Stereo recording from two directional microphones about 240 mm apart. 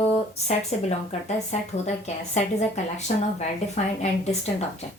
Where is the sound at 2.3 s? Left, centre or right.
Left.